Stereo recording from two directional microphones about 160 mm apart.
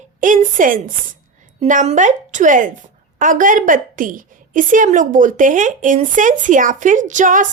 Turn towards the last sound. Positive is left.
turn(degrees=-55)  # may be behind; listen again after turning